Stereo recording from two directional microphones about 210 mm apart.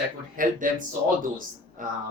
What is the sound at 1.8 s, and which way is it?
Speech, 40° right (ahead or behind).